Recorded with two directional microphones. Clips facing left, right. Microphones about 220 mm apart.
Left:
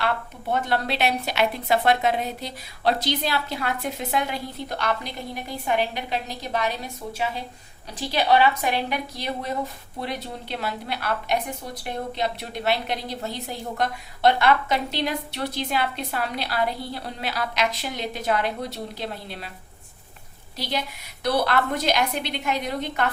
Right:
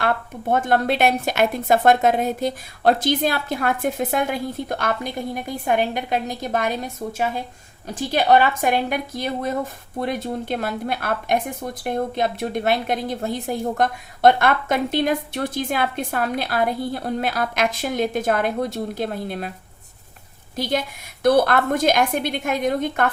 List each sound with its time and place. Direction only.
0.0 s a woman's voice: 50° right (ahead or behind)
20.6 s a woman's voice: 50° right (ahead or behind)